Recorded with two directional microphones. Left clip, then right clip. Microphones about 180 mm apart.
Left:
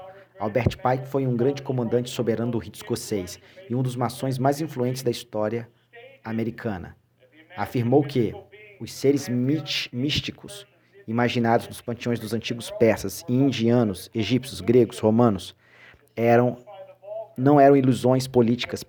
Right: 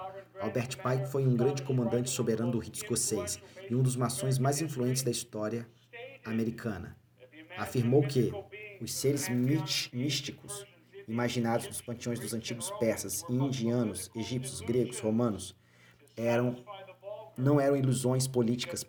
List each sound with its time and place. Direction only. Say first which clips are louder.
0.3 s speech: left 10 dB; 45° left (ahead or behind)